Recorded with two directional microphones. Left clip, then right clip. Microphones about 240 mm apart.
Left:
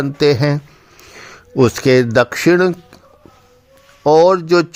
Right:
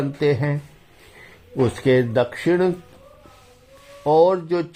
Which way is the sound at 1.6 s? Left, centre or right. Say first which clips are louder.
Left 6 dB; left.